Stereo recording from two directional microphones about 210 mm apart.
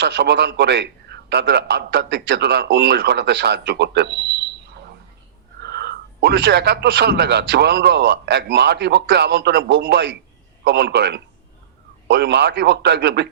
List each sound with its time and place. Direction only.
0.0 s a man's voice: 55° right (ahead or behind)